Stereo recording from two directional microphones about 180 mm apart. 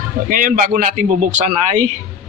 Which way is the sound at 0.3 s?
50° right (ahead or behind).